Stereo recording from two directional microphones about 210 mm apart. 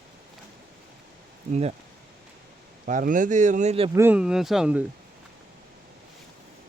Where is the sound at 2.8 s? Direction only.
40° right (ahead or behind).